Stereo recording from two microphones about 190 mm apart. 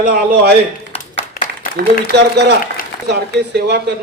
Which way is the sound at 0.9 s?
30° left (ahead or behind).